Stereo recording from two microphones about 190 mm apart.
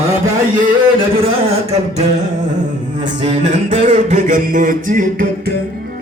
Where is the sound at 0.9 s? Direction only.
30° right (ahead or behind).